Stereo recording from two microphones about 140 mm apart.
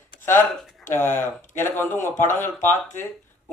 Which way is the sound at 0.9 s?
15° left (ahead or behind).